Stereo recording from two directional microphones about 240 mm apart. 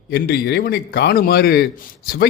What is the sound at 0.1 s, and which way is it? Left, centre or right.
A man's voice, left.